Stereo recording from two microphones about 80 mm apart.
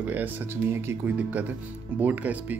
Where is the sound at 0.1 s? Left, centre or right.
Right.